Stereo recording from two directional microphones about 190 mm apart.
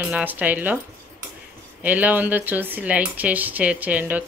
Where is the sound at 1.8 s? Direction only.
10° right (ahead or behind).